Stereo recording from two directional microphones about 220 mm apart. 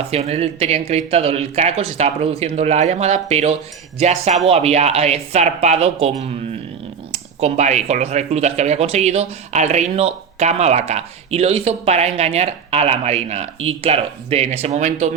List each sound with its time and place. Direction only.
0.1 s speech: 30° right (ahead or behind)